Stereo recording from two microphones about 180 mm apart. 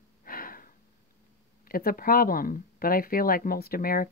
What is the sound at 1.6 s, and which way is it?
Speech, 55° left (ahead or behind).